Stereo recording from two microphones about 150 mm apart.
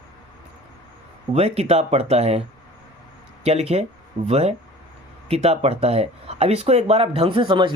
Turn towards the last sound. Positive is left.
turn(degrees=-35)  # may be behind; listen again after turning